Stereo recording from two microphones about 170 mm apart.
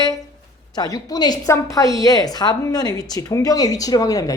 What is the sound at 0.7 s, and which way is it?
A woman's voice, 20° left (ahead or behind).